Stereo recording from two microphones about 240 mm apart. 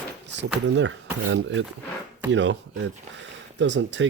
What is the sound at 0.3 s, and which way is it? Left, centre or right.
Speech, right.